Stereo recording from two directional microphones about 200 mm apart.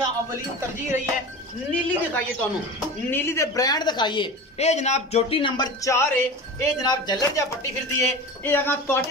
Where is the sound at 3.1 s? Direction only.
15° left (ahead or behind).